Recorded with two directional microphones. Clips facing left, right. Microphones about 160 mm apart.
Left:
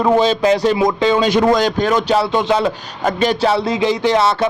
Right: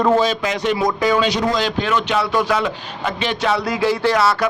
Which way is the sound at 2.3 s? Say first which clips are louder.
Left 3 dB; 25° left (ahead or behind).